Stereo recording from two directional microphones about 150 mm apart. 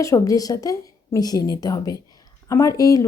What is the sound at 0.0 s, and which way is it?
Speech, 20° left (ahead or behind).